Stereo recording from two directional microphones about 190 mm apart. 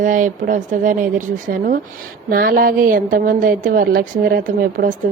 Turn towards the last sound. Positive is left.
turn(degrees=-45)  # may be behind; listen again after turning